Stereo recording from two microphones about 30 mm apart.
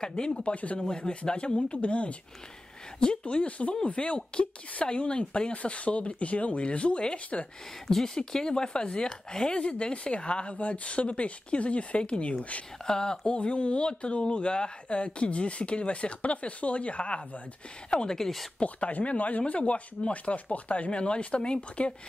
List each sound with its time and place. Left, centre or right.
0.0 s speech: left
3.3 s speech: left
7.9 s speech: centre
9.7 s speech: left
12.8 s speech: left
13.4 s speech: left
18.0 s speech: centre
18.6 s speech: left